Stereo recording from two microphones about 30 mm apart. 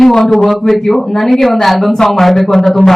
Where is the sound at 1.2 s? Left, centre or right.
Centre.